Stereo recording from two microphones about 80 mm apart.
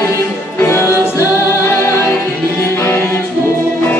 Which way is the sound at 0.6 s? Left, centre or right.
Left.